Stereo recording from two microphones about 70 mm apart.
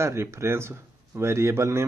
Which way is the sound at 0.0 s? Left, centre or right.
Right.